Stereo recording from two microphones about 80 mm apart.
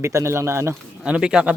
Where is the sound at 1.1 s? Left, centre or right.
Centre.